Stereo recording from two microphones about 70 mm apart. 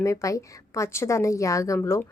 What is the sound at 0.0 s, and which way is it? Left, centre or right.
A woman's voice, left.